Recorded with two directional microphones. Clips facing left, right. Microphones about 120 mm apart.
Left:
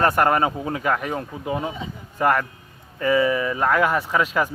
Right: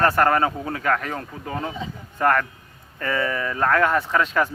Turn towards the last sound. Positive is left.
turn(degrees=10)  # may be behind; listen again after turning